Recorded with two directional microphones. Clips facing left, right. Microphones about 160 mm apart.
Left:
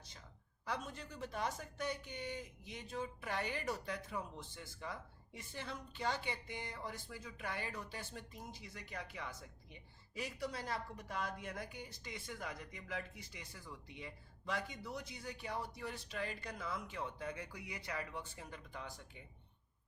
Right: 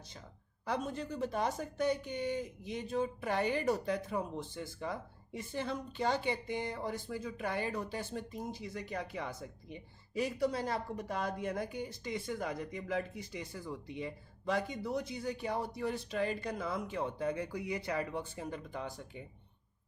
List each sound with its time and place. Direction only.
0.6 s speech: 30° right (ahead or behind)